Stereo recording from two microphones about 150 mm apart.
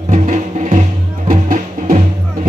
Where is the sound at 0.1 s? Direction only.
55° right (ahead or behind).